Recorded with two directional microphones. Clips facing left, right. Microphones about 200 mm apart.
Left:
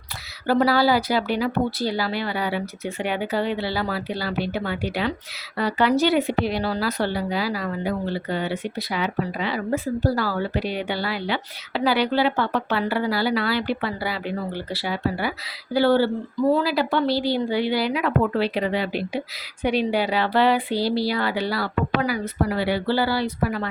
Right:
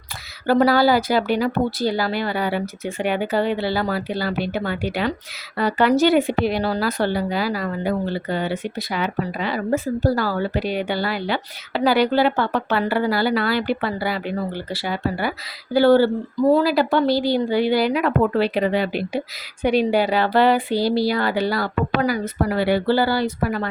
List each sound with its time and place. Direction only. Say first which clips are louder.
0.4 s a woman's voice: right 3 dB; 50° right (ahead or behind)